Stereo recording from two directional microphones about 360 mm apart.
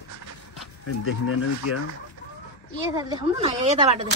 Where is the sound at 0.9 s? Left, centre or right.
Left.